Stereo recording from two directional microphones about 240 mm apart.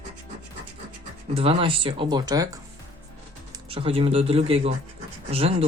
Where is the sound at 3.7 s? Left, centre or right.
Right.